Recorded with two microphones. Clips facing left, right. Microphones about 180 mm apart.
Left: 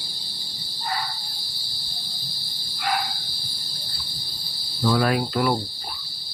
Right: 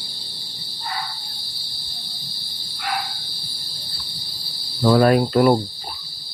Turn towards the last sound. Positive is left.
turn(degrees=-45)  # may be behind; listen again after turning